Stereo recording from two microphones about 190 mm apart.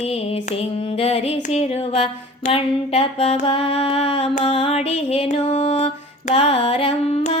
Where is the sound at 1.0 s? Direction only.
30° left (ahead or behind).